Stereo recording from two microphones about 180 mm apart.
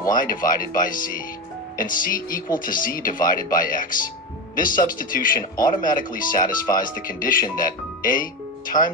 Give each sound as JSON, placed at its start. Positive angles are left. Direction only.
{"t": 0.1, "sound": "speech", "side_deg": 50}